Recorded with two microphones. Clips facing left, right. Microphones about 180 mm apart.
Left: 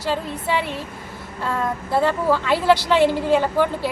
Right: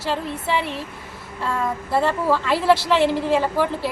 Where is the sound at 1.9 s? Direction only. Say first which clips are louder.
Left 1 dB; centre (ahead or behind).